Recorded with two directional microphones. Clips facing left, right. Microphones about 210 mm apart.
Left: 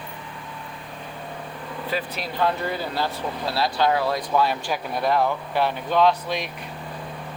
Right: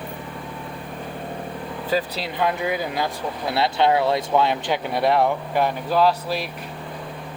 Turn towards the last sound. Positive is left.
turn(degrees=-5)  # may be behind; listen again after turning